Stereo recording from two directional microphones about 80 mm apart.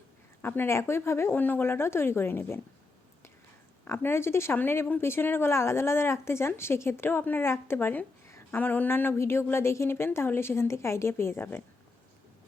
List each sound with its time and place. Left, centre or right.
0.4 s speech: left
3.8 s speech: left